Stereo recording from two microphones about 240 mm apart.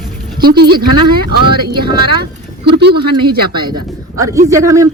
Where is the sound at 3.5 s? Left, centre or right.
Centre.